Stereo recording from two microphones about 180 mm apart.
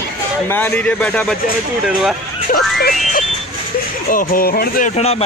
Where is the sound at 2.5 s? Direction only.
50° left (ahead or behind).